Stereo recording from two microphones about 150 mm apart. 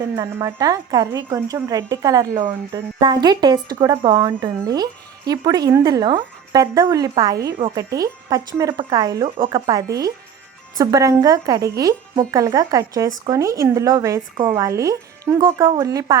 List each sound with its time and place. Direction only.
0.0 s speech: 25° right (ahead or behind)